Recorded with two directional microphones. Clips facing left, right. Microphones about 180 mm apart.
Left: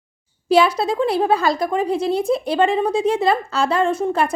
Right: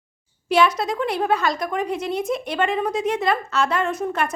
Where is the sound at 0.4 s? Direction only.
30° left (ahead or behind).